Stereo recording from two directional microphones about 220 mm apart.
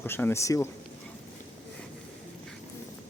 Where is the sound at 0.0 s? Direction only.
10° left (ahead or behind).